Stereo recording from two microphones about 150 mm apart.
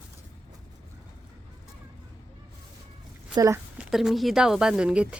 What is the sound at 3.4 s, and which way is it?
Speech, 20° right (ahead or behind).